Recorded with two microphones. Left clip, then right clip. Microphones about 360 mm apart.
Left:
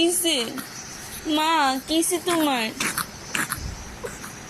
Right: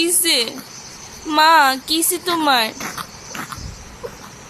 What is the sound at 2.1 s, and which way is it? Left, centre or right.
Speech, right.